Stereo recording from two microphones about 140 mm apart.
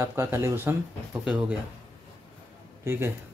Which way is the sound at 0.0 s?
20° right (ahead or behind).